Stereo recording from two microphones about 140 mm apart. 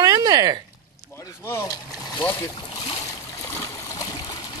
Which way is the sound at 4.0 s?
30° left (ahead or behind).